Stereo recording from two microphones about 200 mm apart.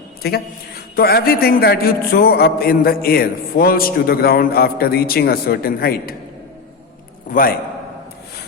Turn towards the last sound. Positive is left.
turn(degrees=40)  # may be behind; listen again after turning